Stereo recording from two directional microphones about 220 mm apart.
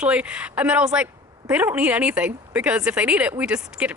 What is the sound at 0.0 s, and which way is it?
Speech, 5° right (ahead or behind).